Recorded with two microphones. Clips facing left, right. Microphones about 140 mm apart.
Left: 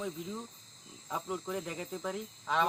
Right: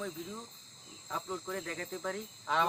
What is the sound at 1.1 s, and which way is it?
Speech, 15° left (ahead or behind).